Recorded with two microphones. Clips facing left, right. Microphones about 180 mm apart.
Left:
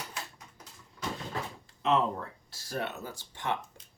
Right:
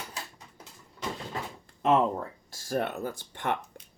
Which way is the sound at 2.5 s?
50° right (ahead or behind).